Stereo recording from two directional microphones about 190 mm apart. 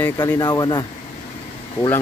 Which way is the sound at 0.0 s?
15° left (ahead or behind).